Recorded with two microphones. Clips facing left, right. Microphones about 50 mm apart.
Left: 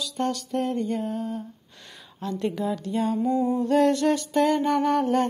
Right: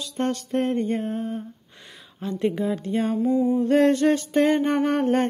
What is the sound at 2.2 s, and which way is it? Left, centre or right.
Speech, centre.